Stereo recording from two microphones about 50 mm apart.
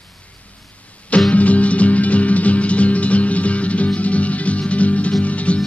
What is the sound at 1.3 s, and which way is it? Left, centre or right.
Music, left.